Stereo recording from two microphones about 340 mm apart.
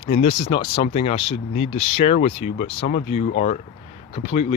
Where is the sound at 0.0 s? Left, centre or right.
Centre.